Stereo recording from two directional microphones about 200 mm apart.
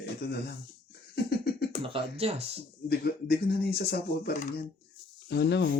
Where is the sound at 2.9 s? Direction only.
50° left (ahead or behind).